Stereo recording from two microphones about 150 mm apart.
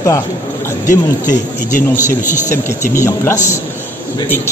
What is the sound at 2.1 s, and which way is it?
Speech, 15° left (ahead or behind).